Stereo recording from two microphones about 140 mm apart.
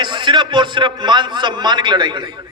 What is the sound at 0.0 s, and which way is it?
A man's voice, 30° right (ahead or behind).